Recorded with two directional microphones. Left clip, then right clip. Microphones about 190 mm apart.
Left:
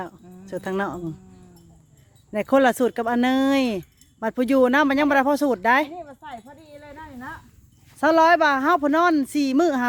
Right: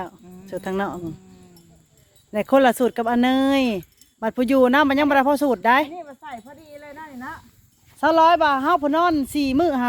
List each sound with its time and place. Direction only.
0.0 s speech: 10° left (ahead or behind)
2.3 s speech: 5° left (ahead or behind)
6.4 s a sound: 5° right (ahead or behind)
7.9 s speech: 20° left (ahead or behind)